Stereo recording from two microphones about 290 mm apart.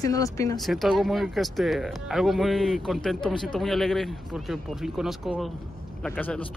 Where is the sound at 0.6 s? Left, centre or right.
Centre.